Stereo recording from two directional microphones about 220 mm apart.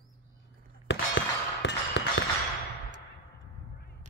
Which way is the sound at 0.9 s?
50° left (ahead or behind).